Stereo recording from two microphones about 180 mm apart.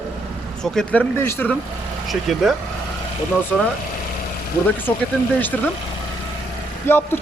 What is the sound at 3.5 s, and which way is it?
Speech, 5° left (ahead or behind).